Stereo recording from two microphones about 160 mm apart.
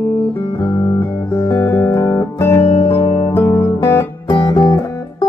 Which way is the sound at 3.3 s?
15° left (ahead or behind).